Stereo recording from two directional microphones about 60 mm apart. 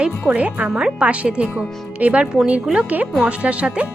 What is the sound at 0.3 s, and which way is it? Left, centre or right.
Speech, right.